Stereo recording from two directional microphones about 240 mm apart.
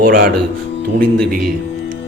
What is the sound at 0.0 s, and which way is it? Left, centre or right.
Speech, right.